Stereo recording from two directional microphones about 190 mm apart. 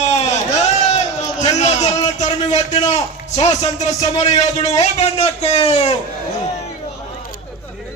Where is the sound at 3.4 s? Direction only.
35° left (ahead or behind).